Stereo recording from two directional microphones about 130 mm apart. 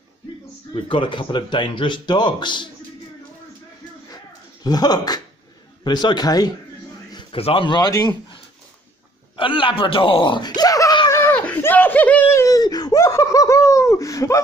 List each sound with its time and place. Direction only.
0.7 s speech: 40° left (ahead or behind)
4.6 s speech: 30° left (ahead or behind)
7.3 s speech: 45° left (ahead or behind)
9.4 s a sound: 40° left (ahead or behind)
11.1 s laughter: 20° left (ahead or behind)